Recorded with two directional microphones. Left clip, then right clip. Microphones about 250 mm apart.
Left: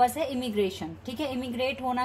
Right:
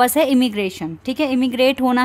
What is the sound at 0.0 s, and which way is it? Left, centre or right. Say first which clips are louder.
A woman's voice: right 10 dB; right.